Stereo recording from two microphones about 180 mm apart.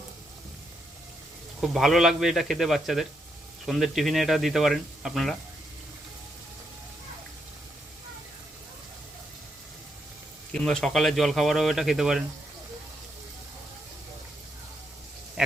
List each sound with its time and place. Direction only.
1.6 s speech: centre (ahead or behind)
10.5 s speech: 5° left (ahead or behind)
15.4 s a sound: 5° right (ahead or behind)